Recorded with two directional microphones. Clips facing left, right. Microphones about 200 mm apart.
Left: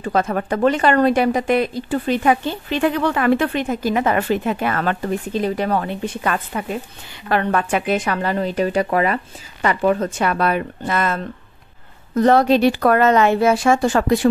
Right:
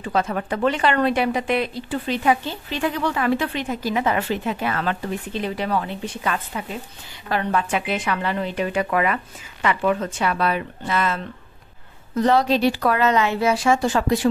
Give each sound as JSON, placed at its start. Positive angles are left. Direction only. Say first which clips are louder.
{"t": 0.0, "sound": "a woman's voice", "louder": "left 3 dB", "side_deg": 50}